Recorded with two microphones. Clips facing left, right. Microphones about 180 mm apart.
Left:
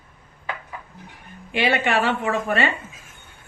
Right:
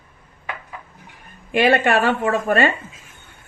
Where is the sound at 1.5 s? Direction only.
50° right (ahead or behind).